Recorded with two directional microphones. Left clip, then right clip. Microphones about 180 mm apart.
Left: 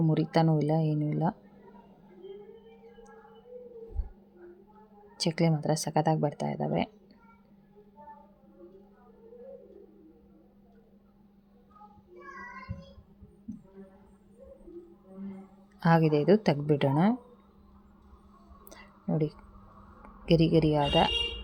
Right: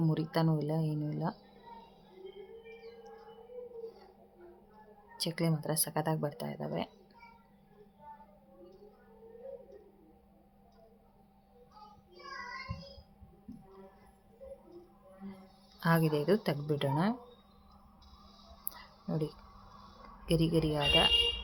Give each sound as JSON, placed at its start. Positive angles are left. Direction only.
{"t": 0.1, "sound": "speech", "side_deg": 25}
{"t": 5.2, "sound": "speech", "side_deg": 30}
{"t": 15.8, "sound": "speech", "side_deg": 25}
{"t": 18.7, "sound": "a sound", "side_deg": 25}
{"t": 20.2, "sound": "speech", "side_deg": 30}